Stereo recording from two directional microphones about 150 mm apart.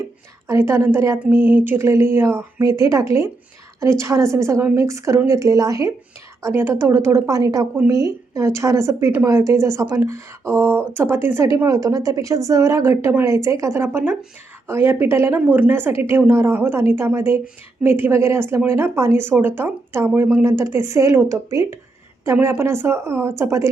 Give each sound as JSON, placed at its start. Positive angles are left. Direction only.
{"t": 0.4, "sound": "speech", "side_deg": -15}